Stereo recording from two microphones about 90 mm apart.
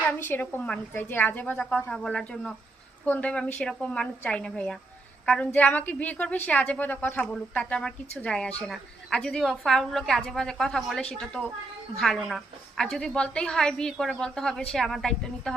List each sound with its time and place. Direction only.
0.2 s a woman's voice: 20° left (ahead or behind); by 15.5 s 5° left (ahead or behind)